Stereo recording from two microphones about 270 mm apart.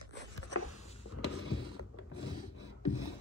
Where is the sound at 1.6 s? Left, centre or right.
Left.